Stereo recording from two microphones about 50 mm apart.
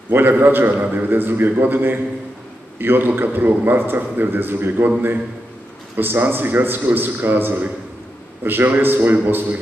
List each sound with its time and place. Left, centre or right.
0.1 s a man's voice: right
5.9 s a man's voice: right